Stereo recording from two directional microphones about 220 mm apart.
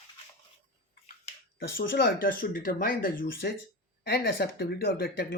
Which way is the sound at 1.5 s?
45° left (ahead or behind).